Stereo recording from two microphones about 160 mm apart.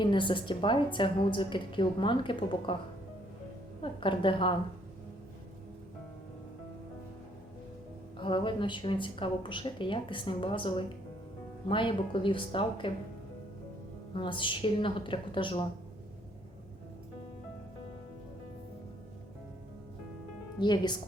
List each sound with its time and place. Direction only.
0.0 s a woman's voice: 30° left (ahead or behind)
4.0 s a woman's voice: 30° left (ahead or behind)
8.2 s a woman's voice: 30° left (ahead or behind)
14.2 s a woman's voice: 30° left (ahead or behind)
20.6 s a woman's voice: 25° left (ahead or behind)